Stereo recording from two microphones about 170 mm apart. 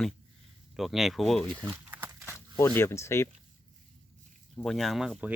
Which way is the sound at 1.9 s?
10° right (ahead or behind).